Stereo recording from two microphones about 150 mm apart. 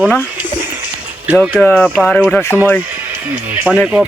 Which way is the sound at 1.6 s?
10° left (ahead or behind).